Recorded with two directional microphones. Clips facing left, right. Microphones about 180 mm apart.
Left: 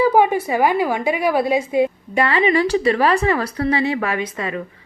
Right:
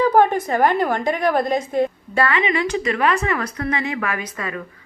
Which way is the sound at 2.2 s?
35° left (ahead or behind).